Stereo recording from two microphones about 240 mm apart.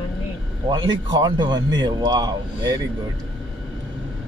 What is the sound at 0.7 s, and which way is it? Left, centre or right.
Speech, centre.